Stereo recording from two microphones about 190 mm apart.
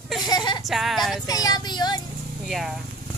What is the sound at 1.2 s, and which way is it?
Speech, 20° left (ahead or behind).